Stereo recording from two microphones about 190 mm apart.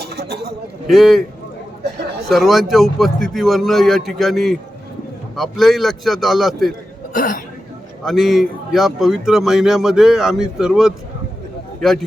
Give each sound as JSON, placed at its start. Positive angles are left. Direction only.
{"t": 0.0, "sound": "a sound", "side_deg": -60}
{"t": 0.9, "sound": "a man's voice", "side_deg": 0}
{"t": 2.3, "sound": "a man's voice", "side_deg": 0}
{"t": 7.1, "sound": "speech", "side_deg": 45}
{"t": 8.0, "sound": "a man's voice", "side_deg": 0}